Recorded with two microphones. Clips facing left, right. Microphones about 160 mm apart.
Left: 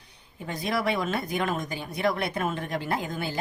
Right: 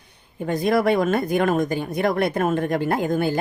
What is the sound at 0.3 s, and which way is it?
Speech, 50° right (ahead or behind).